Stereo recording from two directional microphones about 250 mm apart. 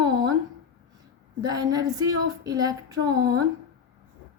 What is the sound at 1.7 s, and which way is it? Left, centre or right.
A woman's voice, centre.